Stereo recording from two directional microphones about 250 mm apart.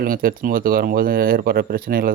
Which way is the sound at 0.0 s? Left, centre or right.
Right.